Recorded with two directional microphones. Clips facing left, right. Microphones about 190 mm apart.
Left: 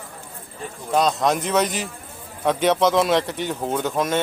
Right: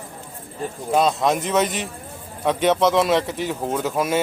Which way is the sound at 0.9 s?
5° right (ahead or behind).